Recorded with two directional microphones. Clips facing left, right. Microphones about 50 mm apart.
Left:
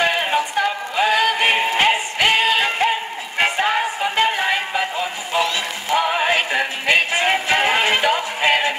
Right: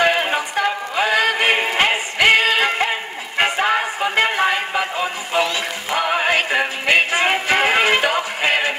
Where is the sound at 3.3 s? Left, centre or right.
Right.